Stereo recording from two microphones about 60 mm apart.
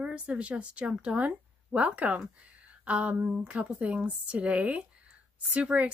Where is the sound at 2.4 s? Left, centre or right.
Right.